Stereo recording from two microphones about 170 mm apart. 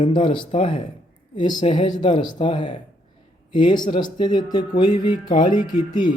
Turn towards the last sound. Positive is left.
turn(degrees=25)  # may be behind; listen again after turning